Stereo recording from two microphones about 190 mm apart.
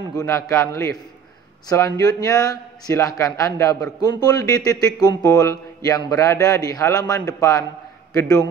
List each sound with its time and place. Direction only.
0.1 s a man's voice: 15° left (ahead or behind)